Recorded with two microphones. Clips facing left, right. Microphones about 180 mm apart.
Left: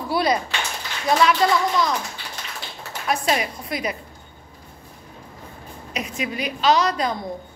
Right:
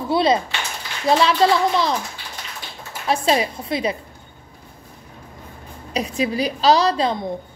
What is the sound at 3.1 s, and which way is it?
Speech, 30° right (ahead or behind).